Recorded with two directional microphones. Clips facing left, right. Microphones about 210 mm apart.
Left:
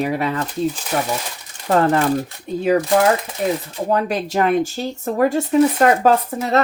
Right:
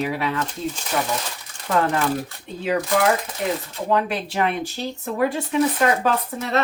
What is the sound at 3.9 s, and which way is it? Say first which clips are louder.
Speech: left 2 dB; 40° left (ahead or behind).